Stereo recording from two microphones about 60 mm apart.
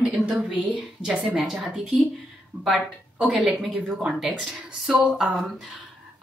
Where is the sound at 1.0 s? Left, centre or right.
Centre.